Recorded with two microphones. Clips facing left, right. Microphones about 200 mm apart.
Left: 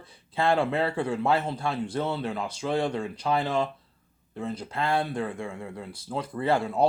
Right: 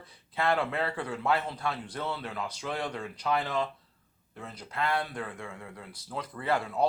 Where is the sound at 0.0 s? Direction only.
25° left (ahead or behind).